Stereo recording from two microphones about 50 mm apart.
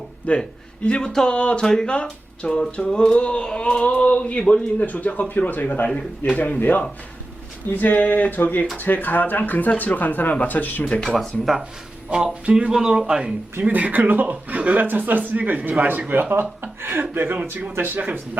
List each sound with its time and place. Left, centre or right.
0.3 s speech: left
0.9 s speech: centre
4.9 s speech: left
10.8 s speech: centre
12.1 s speech: centre
13.7 s speech: right